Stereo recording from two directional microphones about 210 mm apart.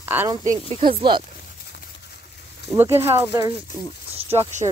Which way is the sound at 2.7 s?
10° right (ahead or behind).